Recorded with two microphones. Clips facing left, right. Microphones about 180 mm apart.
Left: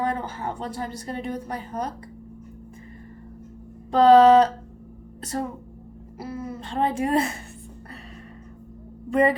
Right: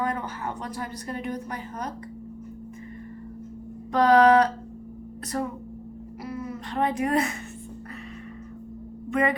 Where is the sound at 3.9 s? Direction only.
30° left (ahead or behind).